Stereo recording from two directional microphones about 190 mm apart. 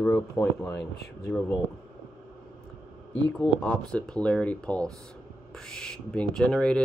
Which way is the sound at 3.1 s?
Centre (ahead or behind).